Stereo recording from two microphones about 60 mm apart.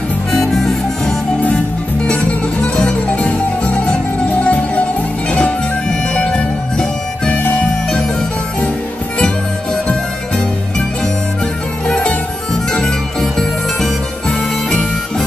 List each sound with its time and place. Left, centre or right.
0.3 s music: centre
2.6 s music: left
11.9 s music: centre
13.2 s music: centre
14.7 s harmonica: centre